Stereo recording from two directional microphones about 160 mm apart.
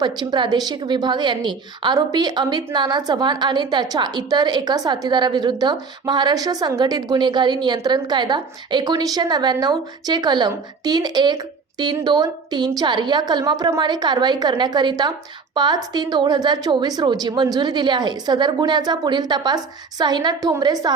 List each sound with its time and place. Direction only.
0.0 s a woman's voice: 30° right (ahead or behind)